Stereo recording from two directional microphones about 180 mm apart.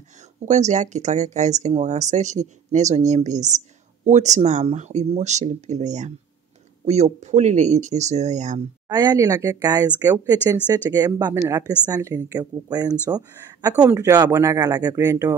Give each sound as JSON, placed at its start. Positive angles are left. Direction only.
{"t": 0.5, "sound": "speech", "side_deg": -40}
{"t": 8.8, "sound": "speech", "side_deg": -20}